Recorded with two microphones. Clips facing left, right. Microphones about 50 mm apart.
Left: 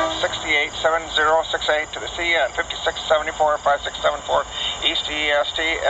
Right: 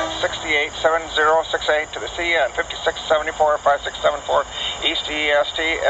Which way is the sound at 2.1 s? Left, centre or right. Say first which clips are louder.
Right 1 dB; right.